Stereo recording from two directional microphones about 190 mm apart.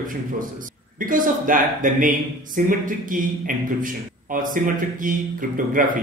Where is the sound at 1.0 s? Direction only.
45° right (ahead or behind).